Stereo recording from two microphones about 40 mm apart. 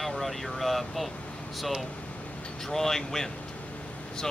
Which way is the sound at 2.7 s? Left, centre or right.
Centre.